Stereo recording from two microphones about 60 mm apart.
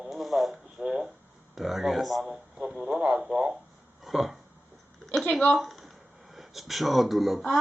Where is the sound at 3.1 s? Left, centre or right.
Centre.